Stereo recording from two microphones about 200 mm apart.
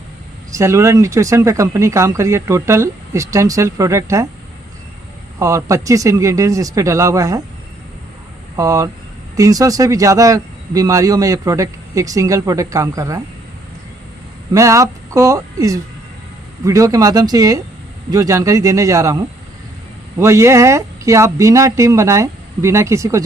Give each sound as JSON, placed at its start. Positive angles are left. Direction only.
{"t": 0.5, "sound": "speech", "side_deg": -15}
{"t": 5.4, "sound": "speech", "side_deg": -15}
{"t": 8.5, "sound": "speech", "side_deg": -15}
{"t": 14.5, "sound": "speech", "side_deg": -15}
{"t": 20.1, "sound": "speech", "side_deg": -15}